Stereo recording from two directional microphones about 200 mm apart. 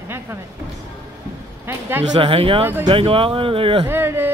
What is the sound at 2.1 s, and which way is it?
Speech, 25° right (ahead or behind).